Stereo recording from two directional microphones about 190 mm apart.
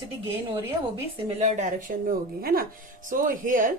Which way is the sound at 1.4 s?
40° right (ahead or behind).